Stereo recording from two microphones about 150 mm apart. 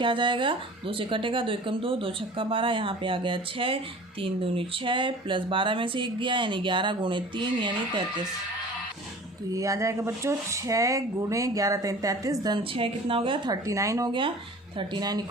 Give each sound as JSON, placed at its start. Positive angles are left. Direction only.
{"t": 0.0, "sound": "speech", "side_deg": -35}
{"t": 9.6, "sound": "speech", "side_deg": -20}
{"t": 12.7, "sound": "speech", "side_deg": -35}